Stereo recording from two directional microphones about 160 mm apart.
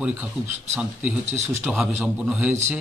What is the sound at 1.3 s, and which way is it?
Speech, 15° right (ahead or behind).